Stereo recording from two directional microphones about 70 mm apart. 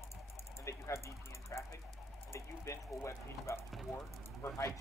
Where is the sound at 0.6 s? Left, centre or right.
Left.